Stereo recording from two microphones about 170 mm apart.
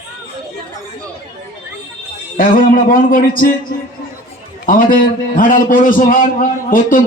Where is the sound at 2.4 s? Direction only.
55° left (ahead or behind).